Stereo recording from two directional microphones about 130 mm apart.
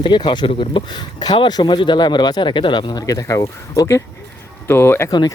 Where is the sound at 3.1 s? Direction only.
25° left (ahead or behind).